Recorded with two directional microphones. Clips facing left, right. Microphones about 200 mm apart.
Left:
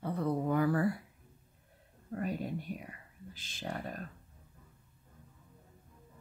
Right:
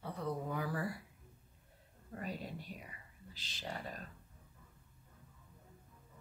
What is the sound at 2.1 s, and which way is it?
Speech, 50° left (ahead or behind).